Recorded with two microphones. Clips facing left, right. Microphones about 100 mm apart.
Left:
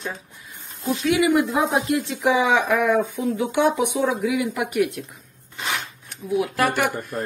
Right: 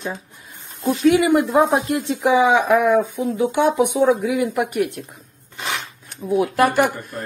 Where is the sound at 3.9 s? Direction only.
40° right (ahead or behind).